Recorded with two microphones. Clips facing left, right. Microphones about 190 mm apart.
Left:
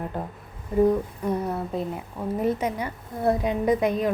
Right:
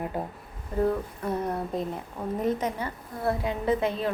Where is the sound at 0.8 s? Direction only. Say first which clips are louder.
Left 5 dB; 15° left (ahead or behind).